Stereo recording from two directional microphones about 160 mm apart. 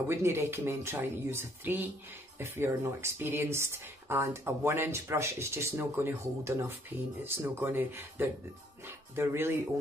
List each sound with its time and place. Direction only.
0.1 s speech: 15° right (ahead or behind)